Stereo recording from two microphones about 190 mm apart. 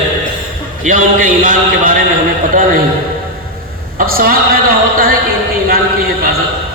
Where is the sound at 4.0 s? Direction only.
50° right (ahead or behind).